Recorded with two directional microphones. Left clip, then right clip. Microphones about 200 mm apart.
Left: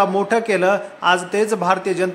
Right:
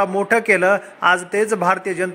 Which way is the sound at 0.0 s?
20° right (ahead or behind).